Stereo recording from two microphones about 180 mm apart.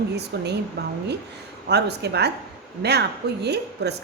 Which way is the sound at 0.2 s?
70° right (ahead or behind).